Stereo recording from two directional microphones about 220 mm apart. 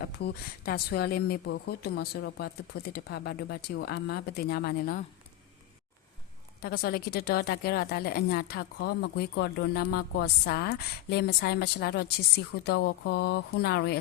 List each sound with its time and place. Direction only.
0.0 s a woman's voice: 50° left (ahead or behind)
6.6 s a woman's voice: 45° left (ahead or behind)